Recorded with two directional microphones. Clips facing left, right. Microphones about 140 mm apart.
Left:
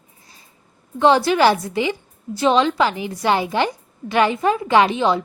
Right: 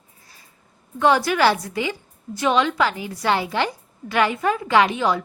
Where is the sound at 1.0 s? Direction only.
25° left (ahead or behind).